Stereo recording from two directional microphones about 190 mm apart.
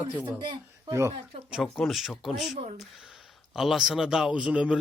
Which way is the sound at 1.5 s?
Centre (ahead or behind).